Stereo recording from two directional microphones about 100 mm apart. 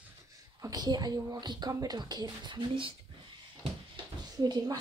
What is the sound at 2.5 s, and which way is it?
Speech, 60° right (ahead or behind).